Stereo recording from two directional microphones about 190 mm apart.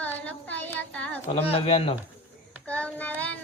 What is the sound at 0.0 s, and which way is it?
Child singing, 10° left (ahead or behind).